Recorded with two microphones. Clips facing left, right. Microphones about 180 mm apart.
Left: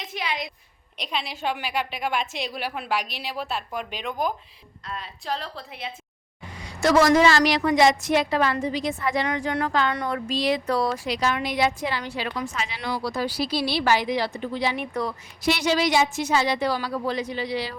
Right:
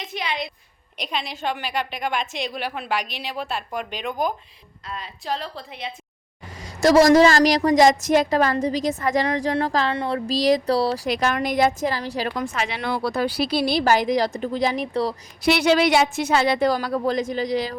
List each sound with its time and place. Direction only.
0.1 s a sound: 5° left (ahead or behind)
0.9 s a woman's voice: centre (ahead or behind)
6.6 s a woman's voice: 40° right (ahead or behind)
11.1 s speech: 50° right (ahead or behind)
12.5 s speech: 65° right (ahead or behind); by 14.8 s 45° right (ahead or behind)
15.4 s speech: 65° right (ahead or behind); by 17.7 s 45° right (ahead or behind)